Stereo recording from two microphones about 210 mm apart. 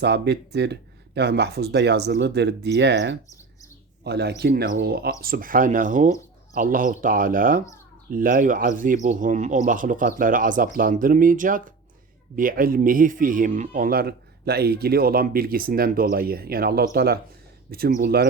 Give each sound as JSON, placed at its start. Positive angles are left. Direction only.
{"t": 0.0, "sound": "speech", "side_deg": -50}